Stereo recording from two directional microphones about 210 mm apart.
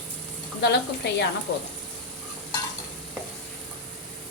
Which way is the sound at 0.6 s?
55° left (ahead or behind).